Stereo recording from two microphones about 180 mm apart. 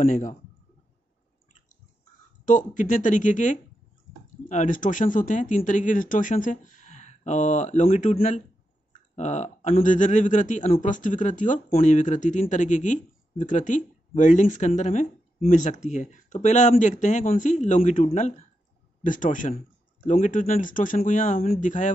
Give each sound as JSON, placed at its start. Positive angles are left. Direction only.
{"t": 0.0, "sound": "speech", "side_deg": 45}
{"t": 2.4, "sound": "speech", "side_deg": 45}